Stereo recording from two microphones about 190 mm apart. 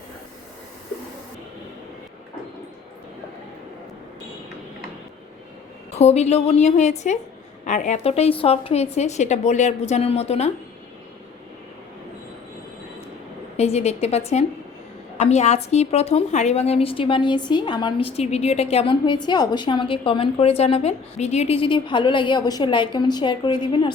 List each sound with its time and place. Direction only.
6.0 s a woman's voice: 35° left (ahead or behind)
13.6 s a woman's voice: 35° left (ahead or behind)